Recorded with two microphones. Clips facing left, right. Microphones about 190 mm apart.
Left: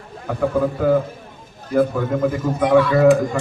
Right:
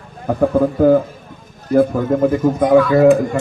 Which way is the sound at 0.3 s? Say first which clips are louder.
Right 5 dB; 30° right (ahead or behind).